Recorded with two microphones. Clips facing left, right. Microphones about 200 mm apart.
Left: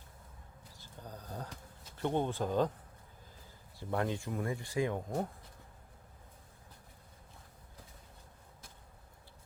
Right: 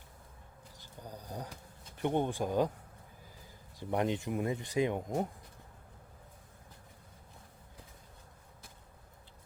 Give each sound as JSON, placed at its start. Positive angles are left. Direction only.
{"t": 0.8, "sound": "a sound", "side_deg": -10}
{"t": 2.0, "sound": "speech", "side_deg": -15}
{"t": 3.8, "sound": "speech", "side_deg": -20}